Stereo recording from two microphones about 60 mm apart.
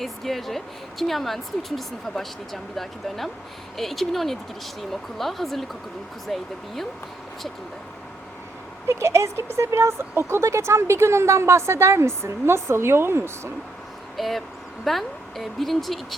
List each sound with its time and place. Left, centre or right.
0.0 s speech: centre
8.9 s speech: right
14.2 s speech: centre